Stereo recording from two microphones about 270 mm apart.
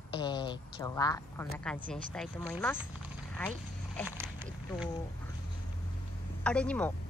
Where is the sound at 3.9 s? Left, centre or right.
Centre.